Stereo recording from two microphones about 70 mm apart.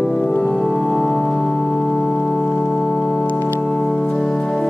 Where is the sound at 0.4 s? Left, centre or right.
Centre.